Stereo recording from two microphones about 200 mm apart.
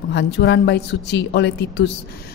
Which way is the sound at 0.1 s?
60° left (ahead or behind).